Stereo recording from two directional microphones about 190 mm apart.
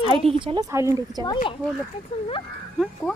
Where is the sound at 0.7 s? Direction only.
15° right (ahead or behind).